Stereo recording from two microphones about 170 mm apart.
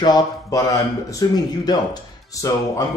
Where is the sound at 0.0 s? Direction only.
20° left (ahead or behind).